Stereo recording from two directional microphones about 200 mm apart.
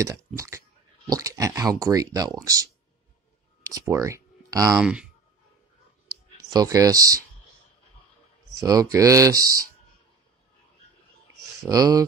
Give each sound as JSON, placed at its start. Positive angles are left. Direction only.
{"t": 0.0, "sound": "speech", "side_deg": -15}
{"t": 3.6, "sound": "speech", "side_deg": -15}
{"t": 4.7, "sound": "speech", "side_deg": -5}
{"t": 6.5, "sound": "speech", "side_deg": -15}
{"t": 8.9, "sound": "speech", "side_deg": -15}
{"t": 11.6, "sound": "speech", "side_deg": -20}